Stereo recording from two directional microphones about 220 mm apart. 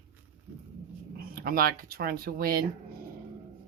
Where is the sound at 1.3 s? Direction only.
40° right (ahead or behind).